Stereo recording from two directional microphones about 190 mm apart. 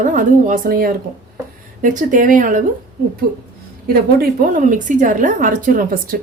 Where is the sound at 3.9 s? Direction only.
50° right (ahead or behind).